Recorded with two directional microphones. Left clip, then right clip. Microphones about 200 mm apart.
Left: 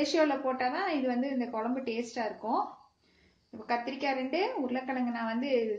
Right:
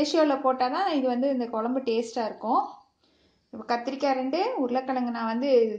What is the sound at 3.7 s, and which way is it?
A woman's voice, 20° right (ahead or behind).